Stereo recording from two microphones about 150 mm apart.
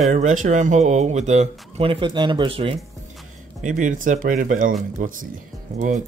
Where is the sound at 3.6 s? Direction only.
55° right (ahead or behind).